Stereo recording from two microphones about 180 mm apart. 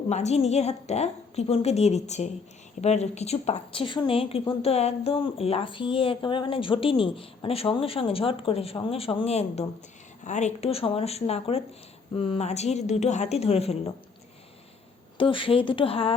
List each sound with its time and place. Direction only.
0.1 s a woman's voice: 40° left (ahead or behind)
15.2 s a woman's voice: 30° left (ahead or behind)